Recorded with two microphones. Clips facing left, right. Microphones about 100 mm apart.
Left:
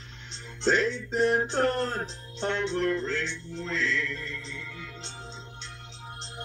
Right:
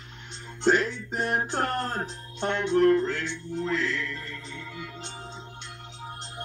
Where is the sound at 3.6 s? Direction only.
50° right (ahead or behind).